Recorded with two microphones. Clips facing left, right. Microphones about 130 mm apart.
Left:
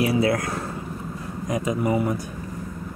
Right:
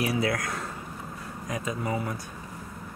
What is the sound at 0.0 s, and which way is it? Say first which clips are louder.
Speech: left 6 dB; 25° left (ahead or behind).